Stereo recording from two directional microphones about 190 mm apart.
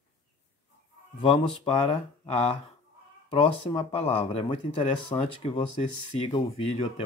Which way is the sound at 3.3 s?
30° left (ahead or behind).